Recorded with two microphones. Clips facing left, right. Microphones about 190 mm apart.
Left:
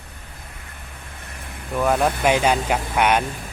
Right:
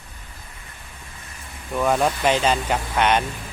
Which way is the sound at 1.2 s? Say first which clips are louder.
Left 4 dB; 60° left (ahead or behind).